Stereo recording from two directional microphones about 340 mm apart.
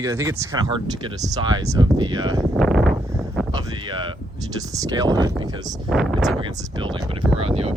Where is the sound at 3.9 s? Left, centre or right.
Centre.